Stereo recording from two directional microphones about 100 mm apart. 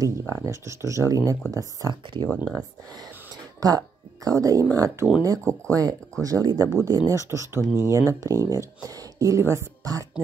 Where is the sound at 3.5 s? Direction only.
35° right (ahead or behind).